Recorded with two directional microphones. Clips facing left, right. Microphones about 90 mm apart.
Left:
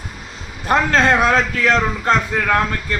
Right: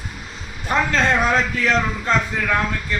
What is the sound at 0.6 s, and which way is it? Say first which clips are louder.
Speech: left 4 dB; 55° left (ahead or behind).